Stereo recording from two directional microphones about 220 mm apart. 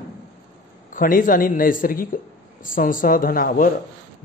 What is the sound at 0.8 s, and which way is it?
Speech, 35° left (ahead or behind).